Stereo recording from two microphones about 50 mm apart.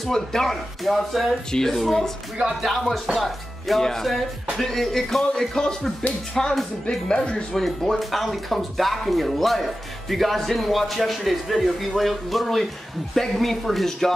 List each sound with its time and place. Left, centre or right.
0.0 s speech: centre
7.5 s speech: centre